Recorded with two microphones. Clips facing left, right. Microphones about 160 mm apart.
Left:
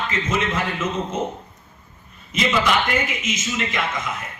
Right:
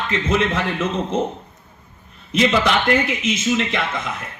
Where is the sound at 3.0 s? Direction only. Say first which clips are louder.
Right 7 dB; 60° right (ahead or behind).